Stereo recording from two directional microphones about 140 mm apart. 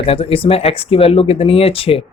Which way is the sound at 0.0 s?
45° left (ahead or behind).